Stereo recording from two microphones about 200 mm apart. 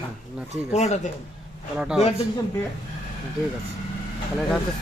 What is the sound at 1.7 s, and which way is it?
Speech, 5° right (ahead or behind).